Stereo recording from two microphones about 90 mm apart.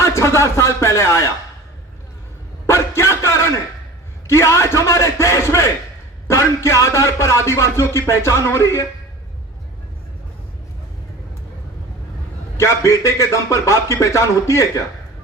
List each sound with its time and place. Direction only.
0.0 s speech: 30° left (ahead or behind)
2.6 s a sound: 30° left (ahead or behind)
4.3 s speech: 30° left (ahead or behind)
12.5 s speech: 30° left (ahead or behind)